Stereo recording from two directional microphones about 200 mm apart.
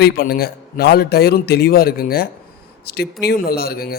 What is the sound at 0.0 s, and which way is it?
A man's voice, 50° left (ahead or behind).